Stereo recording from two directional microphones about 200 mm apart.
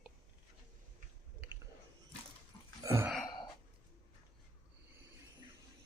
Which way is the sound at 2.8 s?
15° right (ahead or behind).